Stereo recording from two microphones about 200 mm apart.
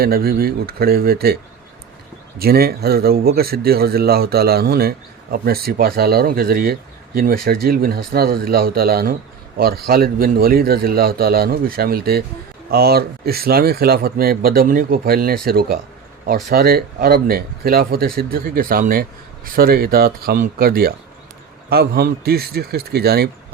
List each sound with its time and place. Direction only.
0.0 s speech: 50° right (ahead or behind)
2.4 s speech: 50° right (ahead or behind)